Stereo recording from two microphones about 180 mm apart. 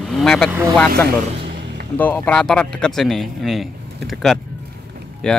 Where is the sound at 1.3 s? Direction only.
65° right (ahead or behind).